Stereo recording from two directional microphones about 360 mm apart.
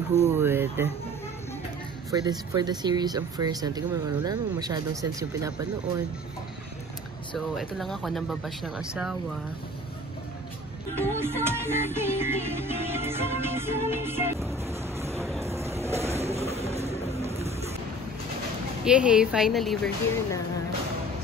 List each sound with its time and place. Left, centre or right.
0.4 s speech: centre
2.0 s speech: centre
7.3 s speech: centre
11.0 s music: centre
18.9 s speech: centre